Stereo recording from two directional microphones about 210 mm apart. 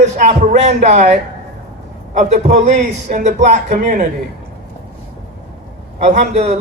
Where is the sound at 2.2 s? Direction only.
35° right (ahead or behind).